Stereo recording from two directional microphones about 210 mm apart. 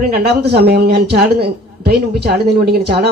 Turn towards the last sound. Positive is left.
turn(degrees=-50)  # may be behind; listen again after turning